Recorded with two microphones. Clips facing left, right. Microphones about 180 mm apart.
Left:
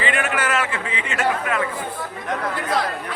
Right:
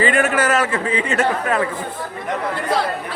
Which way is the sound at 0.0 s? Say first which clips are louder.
Right 6 dB; 40° right (ahead or behind).